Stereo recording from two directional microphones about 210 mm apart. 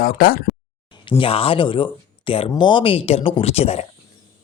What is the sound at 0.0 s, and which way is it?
Speech, 45° left (ahead or behind).